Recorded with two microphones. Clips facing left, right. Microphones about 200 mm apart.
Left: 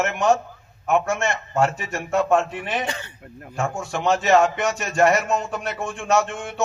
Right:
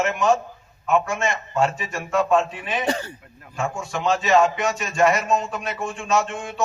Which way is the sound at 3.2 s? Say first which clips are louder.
Left 1 dB; 50° left (ahead or behind).